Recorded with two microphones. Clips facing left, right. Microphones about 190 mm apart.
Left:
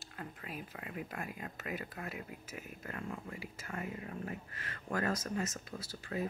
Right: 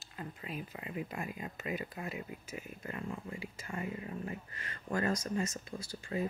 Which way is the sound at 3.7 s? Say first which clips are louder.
Right 2 dB; 10° right (ahead or behind).